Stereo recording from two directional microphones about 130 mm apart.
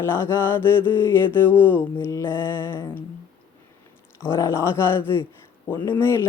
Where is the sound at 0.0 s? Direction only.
20° left (ahead or behind).